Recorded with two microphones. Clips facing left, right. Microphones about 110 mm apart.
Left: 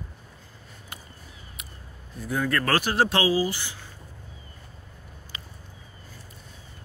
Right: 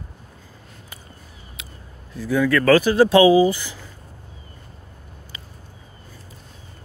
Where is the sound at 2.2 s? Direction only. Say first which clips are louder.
Right 7 dB; 90° right.